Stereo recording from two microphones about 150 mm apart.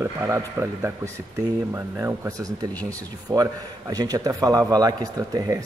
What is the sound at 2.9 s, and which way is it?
A man's voice, 25° right (ahead or behind).